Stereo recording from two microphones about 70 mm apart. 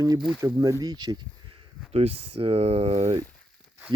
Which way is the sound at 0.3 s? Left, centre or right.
Right.